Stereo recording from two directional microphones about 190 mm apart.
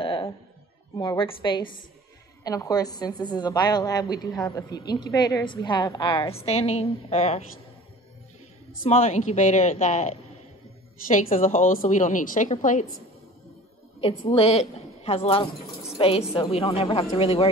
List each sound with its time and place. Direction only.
0.0 s music: 30° left (ahead or behind)
0.9 s a woman's voice: 25° left (ahead or behind)
8.8 s a woman's voice: 35° left (ahead or behind)
14.0 s a woman's voice: 30° left (ahead or behind)